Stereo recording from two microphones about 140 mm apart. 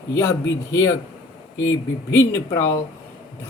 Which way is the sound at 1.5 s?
20° left (ahead or behind).